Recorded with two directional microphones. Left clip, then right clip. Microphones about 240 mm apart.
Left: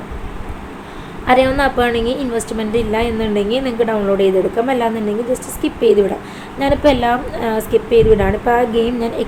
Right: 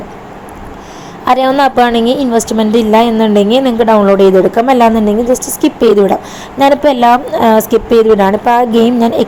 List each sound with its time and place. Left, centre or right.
1.2 s a woman's voice: right
5.3 s a woman's voice: centre
5.6 s a woman's voice: right